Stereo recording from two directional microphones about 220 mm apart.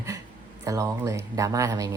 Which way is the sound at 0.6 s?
15° right (ahead or behind).